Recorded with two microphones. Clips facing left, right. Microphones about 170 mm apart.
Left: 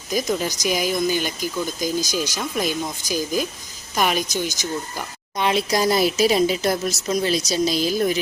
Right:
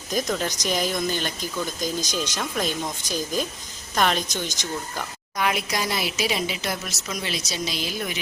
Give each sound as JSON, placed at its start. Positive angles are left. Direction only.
{"t": 0.1, "sound": "speech", "side_deg": 5}
{"t": 5.4, "sound": "speech", "side_deg": 25}
{"t": 5.7, "sound": "speech", "side_deg": 40}